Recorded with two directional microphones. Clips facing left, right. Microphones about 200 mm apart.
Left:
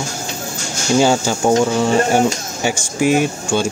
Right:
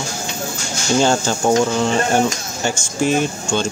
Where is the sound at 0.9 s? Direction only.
10° left (ahead or behind).